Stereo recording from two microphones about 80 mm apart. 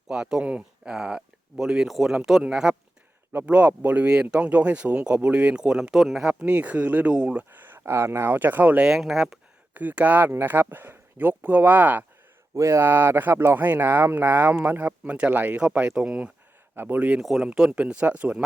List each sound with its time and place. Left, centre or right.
0.1 s speech: centre
6.4 s speech: centre
7.5 s speech: right
8.9 s speech: centre
9.7 s speech: centre
12.5 s speech: right
12.8 s speech: right; by 16.3 s centre
16.7 s speech: right
17.2 s speech: centre